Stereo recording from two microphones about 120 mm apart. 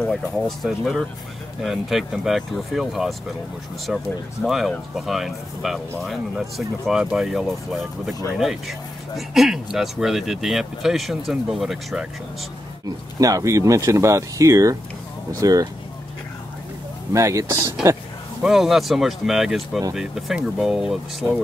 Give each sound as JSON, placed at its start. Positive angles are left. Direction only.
{"t": 0.0, "sound": "speech", "side_deg": 0}
{"t": 12.8, "sound": "speech", "side_deg": -30}
{"t": 17.1, "sound": "speech", "side_deg": -25}
{"t": 18.4, "sound": "speech", "side_deg": -5}